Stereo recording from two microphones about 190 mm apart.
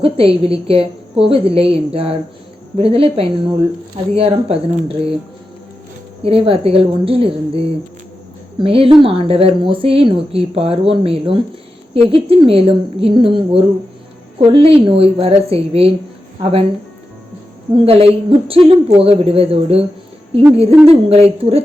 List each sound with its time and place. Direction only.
0.0 s a woman's voice: 30° right (ahead or behind)
6.2 s a woman's voice: 30° right (ahead or behind)
17.8 s speech: 30° right (ahead or behind)
20.8 s a woman's voice: 30° right (ahead or behind)